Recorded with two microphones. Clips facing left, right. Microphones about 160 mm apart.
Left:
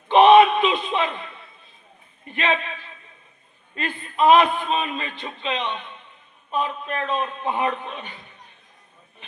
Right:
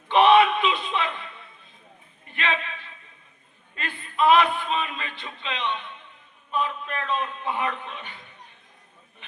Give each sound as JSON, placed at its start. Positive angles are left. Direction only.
{"t": 0.1, "sound": "a sound", "side_deg": 20}
{"t": 2.3, "sound": "a man's voice", "side_deg": 20}
{"t": 3.8, "sound": "a man's voice", "side_deg": 20}